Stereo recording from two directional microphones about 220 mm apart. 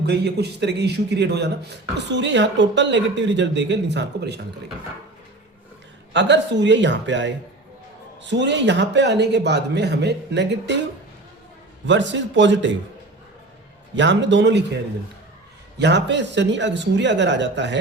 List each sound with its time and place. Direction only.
0.0 s speech: 50° right (ahead or behind)
6.1 s speech: 55° right (ahead or behind)
11.9 s speech: 55° right (ahead or behind)
13.9 s speech: 55° right (ahead or behind)
15.8 s speech: 50° right (ahead or behind)